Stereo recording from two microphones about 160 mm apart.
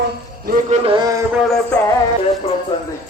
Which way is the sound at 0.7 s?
35° right (ahead or behind).